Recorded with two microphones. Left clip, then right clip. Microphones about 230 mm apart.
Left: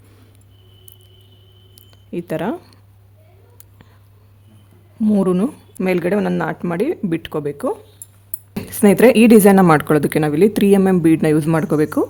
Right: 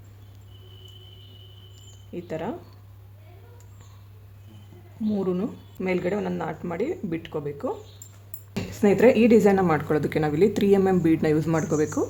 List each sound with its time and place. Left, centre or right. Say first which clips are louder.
1.7 s mouse: left 10 dB; left
5.0 s a woman's voice: left 10 dB; left